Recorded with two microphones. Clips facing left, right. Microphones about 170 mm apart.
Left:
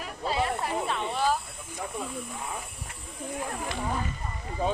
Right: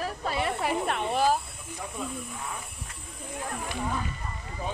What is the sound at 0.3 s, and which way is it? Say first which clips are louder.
Snake: left 1 dB; 60° right (ahead or behind).